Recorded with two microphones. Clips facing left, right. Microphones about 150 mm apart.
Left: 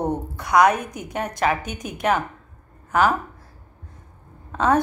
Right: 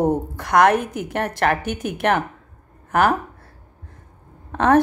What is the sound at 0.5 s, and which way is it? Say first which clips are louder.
A woman's voice: right 2 dB; 60° right (ahead or behind).